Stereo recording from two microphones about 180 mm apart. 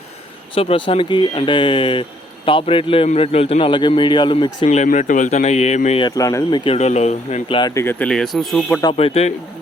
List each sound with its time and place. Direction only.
0.5 s speech: 30° left (ahead or behind)
6.0 s speech: 20° left (ahead or behind)
6.7 s speech: 40° left (ahead or behind)
7.7 s speech: 15° left (ahead or behind)
8.8 s speech: 30° left (ahead or behind)